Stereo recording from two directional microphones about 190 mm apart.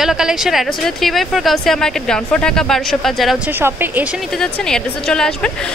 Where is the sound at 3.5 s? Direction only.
10° right (ahead or behind).